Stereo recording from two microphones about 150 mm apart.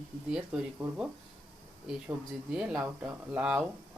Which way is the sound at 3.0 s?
5° right (ahead or behind).